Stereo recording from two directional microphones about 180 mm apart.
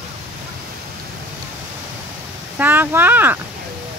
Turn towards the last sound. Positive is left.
turn(degrees=-10)  # may be behind; listen again after turning